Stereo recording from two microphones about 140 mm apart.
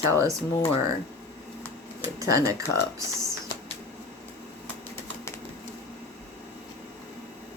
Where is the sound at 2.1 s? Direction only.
25° right (ahead or behind).